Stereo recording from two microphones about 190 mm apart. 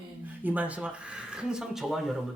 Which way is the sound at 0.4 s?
10° right (ahead or behind).